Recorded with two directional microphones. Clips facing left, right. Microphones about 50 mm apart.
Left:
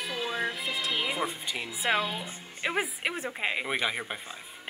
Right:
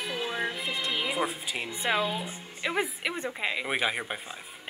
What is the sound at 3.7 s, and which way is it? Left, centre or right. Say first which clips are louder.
Speech: right 1 dB; centre.